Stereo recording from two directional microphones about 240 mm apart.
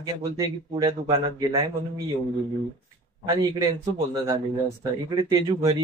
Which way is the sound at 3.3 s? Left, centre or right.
Centre.